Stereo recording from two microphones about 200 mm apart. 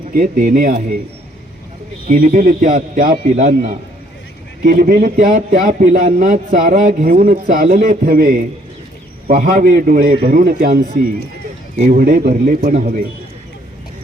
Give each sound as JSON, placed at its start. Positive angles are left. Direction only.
{"t": 0.1, "sound": "a man's voice", "side_deg": -40}
{"t": 2.0, "sound": "a man's voice", "side_deg": -45}